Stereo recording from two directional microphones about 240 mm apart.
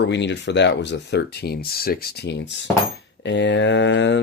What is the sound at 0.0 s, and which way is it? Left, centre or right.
Speech, left.